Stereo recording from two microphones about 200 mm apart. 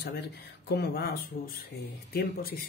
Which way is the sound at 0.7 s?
50° left (ahead or behind).